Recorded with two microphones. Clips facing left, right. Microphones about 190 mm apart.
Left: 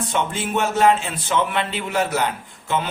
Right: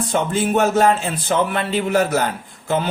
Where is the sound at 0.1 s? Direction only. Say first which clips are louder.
Right 6 dB; 40° right (ahead or behind).